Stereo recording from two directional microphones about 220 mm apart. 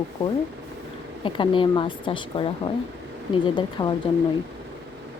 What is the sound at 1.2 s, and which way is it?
Speech, 20° left (ahead or behind).